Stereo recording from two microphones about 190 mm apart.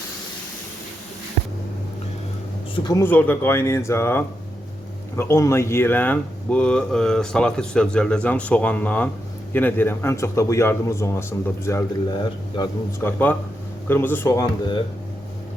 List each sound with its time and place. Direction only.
2.7 s speech: 20° left (ahead or behind)